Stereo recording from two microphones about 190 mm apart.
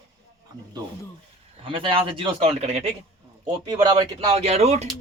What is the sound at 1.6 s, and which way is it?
Speech, 25° right (ahead or behind).